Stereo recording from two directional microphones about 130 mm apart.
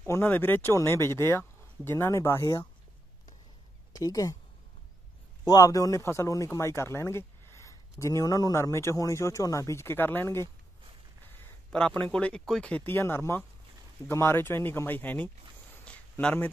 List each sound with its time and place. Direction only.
0.0 s speech: 15° left (ahead or behind)
3.9 s speech: 25° left (ahead or behind)
5.4 s speech: 30° left (ahead or behind)
11.7 s speech: 10° left (ahead or behind)
15.8 s a sound: 10° left (ahead or behind)